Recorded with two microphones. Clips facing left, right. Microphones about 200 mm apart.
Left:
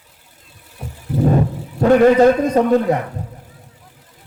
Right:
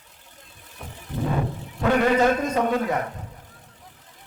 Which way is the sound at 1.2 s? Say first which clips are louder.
Left 9 dB; 40° left (ahead or behind).